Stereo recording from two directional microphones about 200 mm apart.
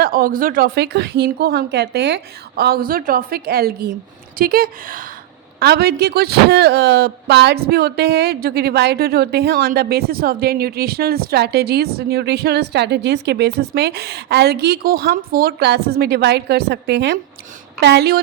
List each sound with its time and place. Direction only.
0.0 s a man's voice: 45° right (ahead or behind)